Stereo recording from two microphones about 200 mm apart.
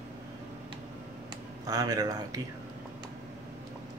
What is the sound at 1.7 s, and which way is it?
Speech, 20° right (ahead or behind).